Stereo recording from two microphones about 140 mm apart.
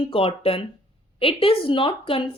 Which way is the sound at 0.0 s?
40° left (ahead or behind).